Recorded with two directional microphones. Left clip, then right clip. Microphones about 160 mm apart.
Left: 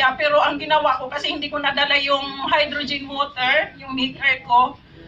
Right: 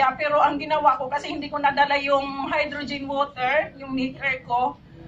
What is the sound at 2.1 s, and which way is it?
Speech, 50° right (ahead or behind).